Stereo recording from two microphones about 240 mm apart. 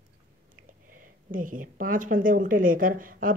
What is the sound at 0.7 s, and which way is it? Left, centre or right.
Speech, right.